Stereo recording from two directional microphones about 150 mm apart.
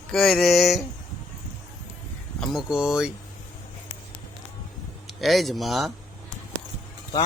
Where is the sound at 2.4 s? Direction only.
Centre (ahead or behind).